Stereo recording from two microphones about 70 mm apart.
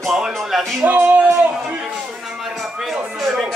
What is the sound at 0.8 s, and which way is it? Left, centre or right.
Music, right.